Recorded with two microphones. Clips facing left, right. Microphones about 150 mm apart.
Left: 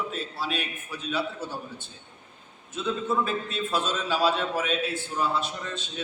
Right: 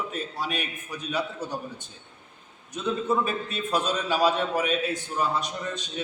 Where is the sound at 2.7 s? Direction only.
15° right (ahead or behind).